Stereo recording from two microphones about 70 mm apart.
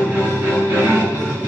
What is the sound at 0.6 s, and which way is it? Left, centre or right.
Music, right.